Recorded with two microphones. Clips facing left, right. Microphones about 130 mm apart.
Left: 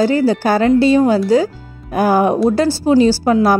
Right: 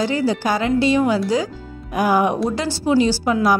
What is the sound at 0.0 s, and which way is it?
A woman's voice, 40° left (ahead or behind).